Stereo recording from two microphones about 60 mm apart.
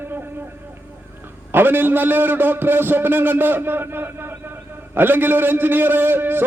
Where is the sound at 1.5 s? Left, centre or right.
Right.